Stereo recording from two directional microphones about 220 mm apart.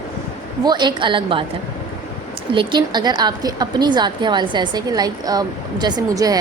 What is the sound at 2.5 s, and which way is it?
A woman's voice, 20° right (ahead or behind).